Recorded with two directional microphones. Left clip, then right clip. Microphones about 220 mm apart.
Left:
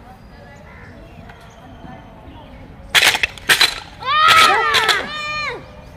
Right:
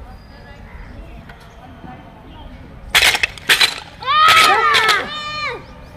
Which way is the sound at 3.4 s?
10° left (ahead or behind).